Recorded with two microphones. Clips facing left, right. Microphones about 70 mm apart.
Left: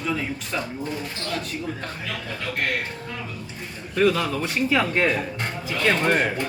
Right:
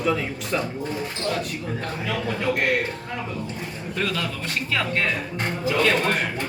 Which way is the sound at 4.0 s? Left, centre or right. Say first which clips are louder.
Left 7 dB; centre.